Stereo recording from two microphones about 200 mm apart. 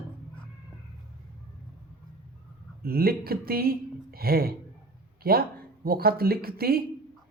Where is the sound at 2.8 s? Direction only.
50° right (ahead or behind).